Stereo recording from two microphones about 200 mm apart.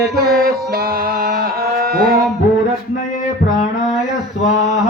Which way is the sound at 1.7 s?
50° right (ahead or behind).